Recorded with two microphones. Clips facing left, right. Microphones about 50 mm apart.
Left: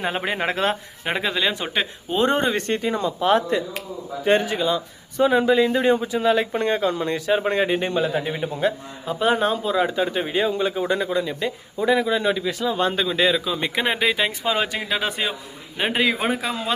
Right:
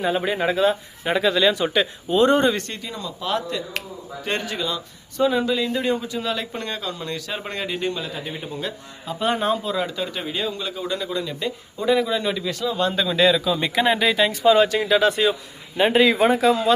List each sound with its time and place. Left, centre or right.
0.3 s speech: left
1.0 s a man's voice: left
4.2 s a man's voice: centre
9.0 s speech: centre
9.7 s a man's voice: left
11.1 s a man's voice: centre